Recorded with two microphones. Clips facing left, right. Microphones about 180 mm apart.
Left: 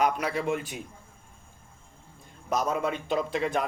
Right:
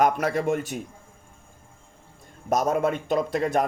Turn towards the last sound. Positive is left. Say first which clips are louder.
# right 4 dB
turn(degrees=-45)  # may be behind; listen again after turning